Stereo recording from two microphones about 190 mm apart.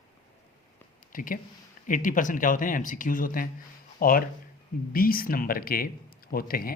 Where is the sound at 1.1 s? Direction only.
45° left (ahead or behind).